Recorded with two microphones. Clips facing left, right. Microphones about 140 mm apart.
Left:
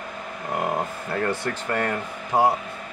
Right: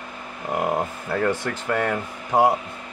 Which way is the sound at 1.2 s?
5° right (ahead or behind).